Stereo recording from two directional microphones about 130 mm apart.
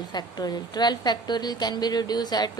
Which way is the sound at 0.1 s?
30° left (ahead or behind).